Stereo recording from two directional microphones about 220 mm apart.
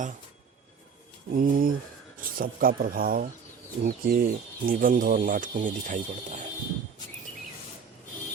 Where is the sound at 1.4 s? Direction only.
40° right (ahead or behind).